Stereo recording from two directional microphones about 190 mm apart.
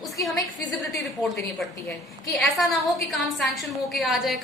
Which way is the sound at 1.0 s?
Centre (ahead or behind).